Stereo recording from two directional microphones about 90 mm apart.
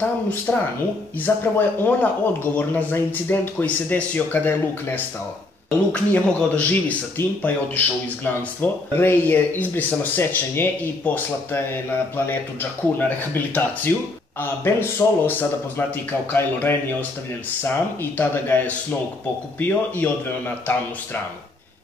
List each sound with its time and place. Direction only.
0.0 s speech: 15° left (ahead or behind)
12.9 s speech: 20° left (ahead or behind)